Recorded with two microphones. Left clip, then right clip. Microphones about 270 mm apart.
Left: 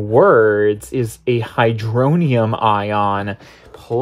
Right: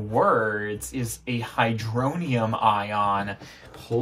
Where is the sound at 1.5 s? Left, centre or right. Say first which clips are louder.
Left 6 dB; left.